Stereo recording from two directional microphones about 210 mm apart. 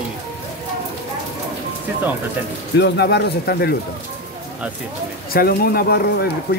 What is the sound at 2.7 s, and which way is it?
Speech, 50° left (ahead or behind).